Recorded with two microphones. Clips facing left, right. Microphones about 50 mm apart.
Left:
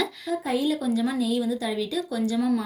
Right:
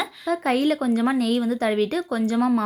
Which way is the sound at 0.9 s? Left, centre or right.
Right.